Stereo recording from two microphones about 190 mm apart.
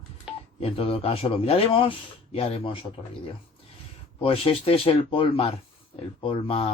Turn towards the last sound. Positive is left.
turn(degrees=30)  # may be behind; listen again after turning